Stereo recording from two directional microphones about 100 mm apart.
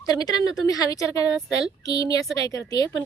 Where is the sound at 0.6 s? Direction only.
35° left (ahead or behind).